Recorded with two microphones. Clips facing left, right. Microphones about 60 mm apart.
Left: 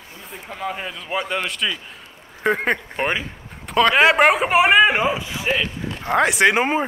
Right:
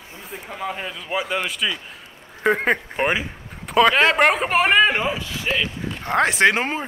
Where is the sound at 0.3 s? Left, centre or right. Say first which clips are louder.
Left 1 dB; centre.